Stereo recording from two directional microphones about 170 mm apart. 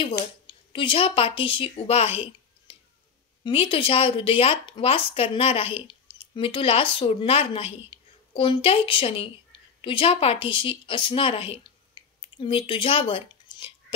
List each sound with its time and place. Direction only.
0.5 s a woman's voice: 30° left (ahead or behind)
2.7 s a sound: 30° left (ahead or behind)
3.4 s a woman's voice: 30° left (ahead or behind)